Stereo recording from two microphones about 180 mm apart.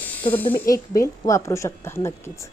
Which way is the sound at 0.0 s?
10° left (ahead or behind).